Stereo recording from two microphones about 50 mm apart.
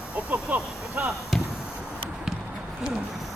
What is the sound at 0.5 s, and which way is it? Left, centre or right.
Speech, right.